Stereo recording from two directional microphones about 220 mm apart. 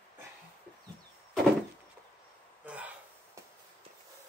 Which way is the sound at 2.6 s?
5° right (ahead or behind).